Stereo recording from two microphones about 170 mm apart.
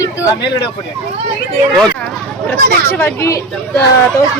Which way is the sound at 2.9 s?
15° left (ahead or behind).